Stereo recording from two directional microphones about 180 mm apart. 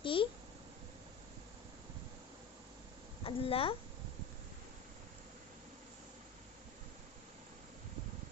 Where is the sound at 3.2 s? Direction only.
30° left (ahead or behind).